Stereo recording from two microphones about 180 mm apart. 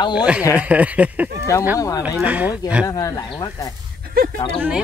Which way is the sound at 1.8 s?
20° left (ahead or behind).